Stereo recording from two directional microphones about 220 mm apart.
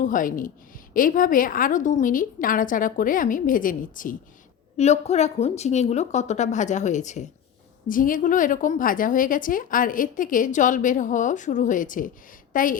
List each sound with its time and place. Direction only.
0.0 s a woman's voice: 35° left (ahead or behind)